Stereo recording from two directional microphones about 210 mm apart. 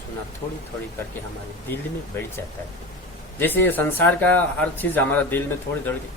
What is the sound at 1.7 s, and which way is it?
Speech, 10° left (ahead or behind).